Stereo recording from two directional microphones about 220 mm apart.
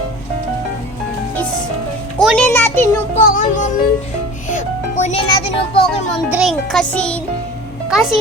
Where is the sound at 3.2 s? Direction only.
35° left (ahead or behind).